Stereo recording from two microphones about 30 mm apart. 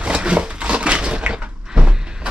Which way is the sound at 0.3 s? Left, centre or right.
Right.